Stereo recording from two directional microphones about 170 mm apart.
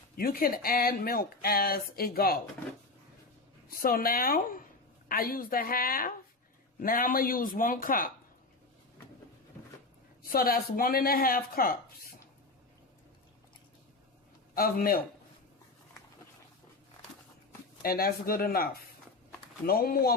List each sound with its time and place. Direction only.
0.2 s speech: 60° left (ahead or behind)
3.7 s speech: 60° left (ahead or behind)
10.3 s speech: 60° left (ahead or behind)
14.5 s speech: 60° left (ahead or behind)
17.8 s speech: 60° left (ahead or behind)